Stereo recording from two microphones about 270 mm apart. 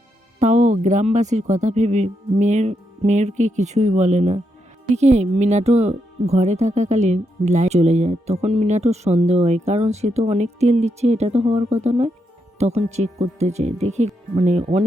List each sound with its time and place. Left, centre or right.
0.3 s speech: right